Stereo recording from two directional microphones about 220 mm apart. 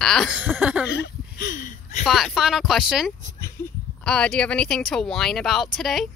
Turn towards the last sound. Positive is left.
turn(degrees=0)  # may be behind; listen again after turning